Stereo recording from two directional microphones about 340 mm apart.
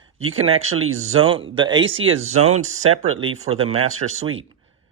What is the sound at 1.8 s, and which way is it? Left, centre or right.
Speech, right.